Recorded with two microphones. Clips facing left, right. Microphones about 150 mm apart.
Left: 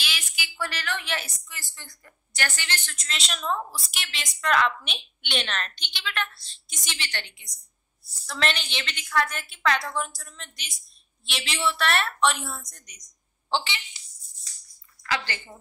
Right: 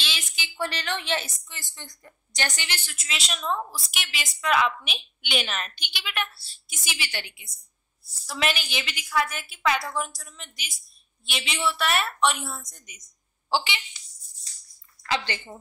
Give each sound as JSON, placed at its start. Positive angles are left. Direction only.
{"t": 0.0, "sound": "a woman's voice", "side_deg": -25}
{"t": 15.0, "sound": "a woman's voice", "side_deg": -20}